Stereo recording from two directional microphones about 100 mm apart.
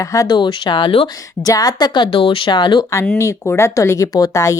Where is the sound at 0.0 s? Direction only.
35° left (ahead or behind).